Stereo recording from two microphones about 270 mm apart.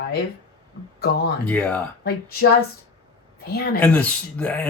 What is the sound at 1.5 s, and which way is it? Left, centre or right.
Speech, centre.